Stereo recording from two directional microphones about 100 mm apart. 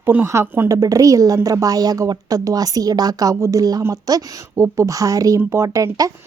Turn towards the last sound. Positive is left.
turn(degrees=-35)  # may be behind; listen again after turning